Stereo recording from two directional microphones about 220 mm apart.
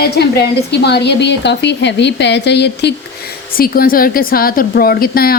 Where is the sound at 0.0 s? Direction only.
45° left (ahead or behind).